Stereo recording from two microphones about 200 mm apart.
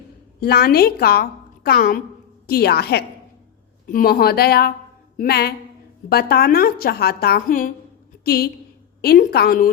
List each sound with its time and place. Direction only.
0.3 s a woman's voice: 50° left (ahead or behind)